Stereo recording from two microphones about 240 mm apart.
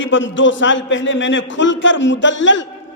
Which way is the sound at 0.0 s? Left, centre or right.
Left.